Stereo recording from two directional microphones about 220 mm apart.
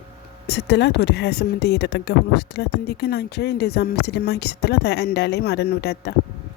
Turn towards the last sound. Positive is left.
turn(degrees=50)  # may be behind; listen again after turning